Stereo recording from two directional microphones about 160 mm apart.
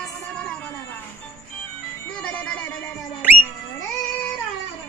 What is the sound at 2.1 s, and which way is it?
Music, 10° left (ahead or behind).